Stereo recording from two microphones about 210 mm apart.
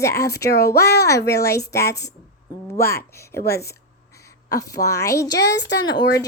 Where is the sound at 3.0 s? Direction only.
15° left (ahead or behind).